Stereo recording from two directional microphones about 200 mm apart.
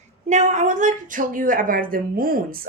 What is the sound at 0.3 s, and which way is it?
A woman's voice, 35° right (ahead or behind).